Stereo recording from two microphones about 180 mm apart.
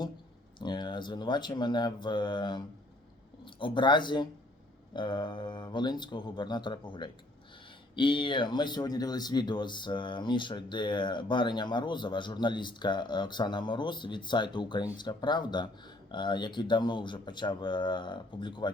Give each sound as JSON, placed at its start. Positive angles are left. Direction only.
{"t": 0.6, "sound": "speech", "side_deg": 25}